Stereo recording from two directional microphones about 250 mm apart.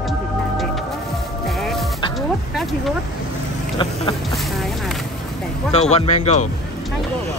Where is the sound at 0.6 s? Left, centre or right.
Centre.